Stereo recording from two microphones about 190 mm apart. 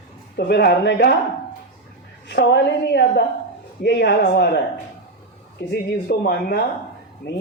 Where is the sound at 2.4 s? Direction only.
60° left (ahead or behind).